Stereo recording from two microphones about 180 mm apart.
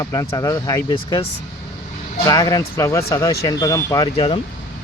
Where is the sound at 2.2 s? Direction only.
20° left (ahead or behind).